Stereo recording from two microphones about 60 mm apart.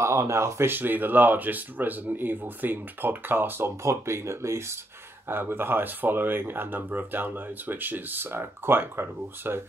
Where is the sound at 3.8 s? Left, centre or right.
Right.